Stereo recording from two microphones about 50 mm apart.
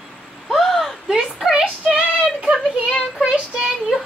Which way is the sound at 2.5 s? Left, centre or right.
Centre.